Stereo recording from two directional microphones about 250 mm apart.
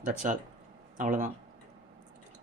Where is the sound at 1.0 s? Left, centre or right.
Right.